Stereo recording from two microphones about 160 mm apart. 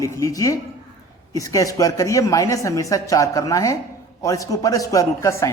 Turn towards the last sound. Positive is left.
turn(degrees=20)  # may be behind; listen again after turning